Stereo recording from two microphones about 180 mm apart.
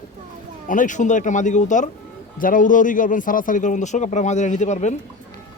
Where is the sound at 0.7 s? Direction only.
45° left (ahead or behind).